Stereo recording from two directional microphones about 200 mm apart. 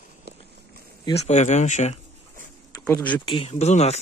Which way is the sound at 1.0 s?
35° left (ahead or behind).